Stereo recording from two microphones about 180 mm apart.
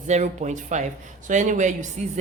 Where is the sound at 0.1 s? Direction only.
40° right (ahead or behind).